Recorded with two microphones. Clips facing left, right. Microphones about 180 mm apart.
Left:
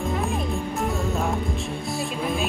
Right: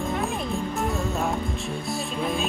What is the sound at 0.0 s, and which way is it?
Music, centre (ahead or behind).